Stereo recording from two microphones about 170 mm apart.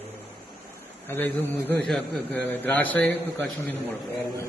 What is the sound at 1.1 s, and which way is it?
A man's voice, 10° left (ahead or behind).